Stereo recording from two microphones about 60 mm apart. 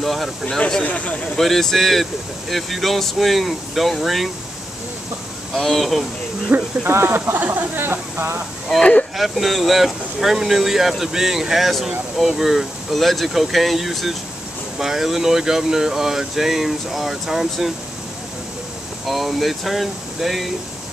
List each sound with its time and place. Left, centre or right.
0.0 s speech: centre
0.6 s speech: centre
0.8 s speech: left
1.4 s speech: centre
5.5 s speech: centre
6.5 s speech: right
9.1 s speech: centre
19.0 s speech: centre